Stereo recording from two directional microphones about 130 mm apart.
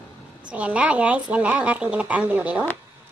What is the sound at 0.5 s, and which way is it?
A woman's voice, 10° right (ahead or behind).